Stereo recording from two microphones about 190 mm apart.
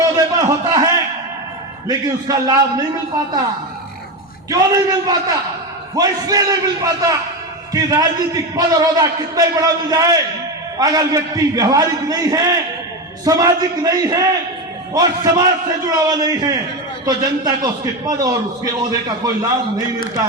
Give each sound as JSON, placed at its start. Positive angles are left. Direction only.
{"t": 0.0, "sound": "a sound", "side_deg": -20}
{"t": 1.9, "sound": "a man's voice", "side_deg": -20}
{"t": 4.4, "sound": "a man's voice", "side_deg": -20}